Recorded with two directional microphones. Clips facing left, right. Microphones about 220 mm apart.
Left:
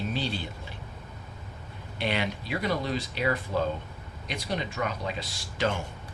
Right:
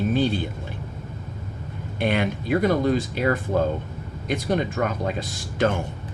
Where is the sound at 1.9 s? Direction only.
50° right (ahead or behind).